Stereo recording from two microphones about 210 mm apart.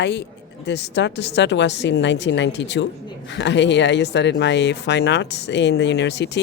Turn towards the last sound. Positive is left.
turn(degrees=55)  # may be behind; listen again after turning